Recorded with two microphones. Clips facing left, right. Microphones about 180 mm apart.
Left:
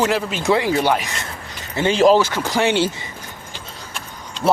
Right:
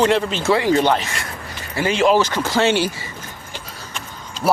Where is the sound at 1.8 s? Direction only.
30° left (ahead or behind).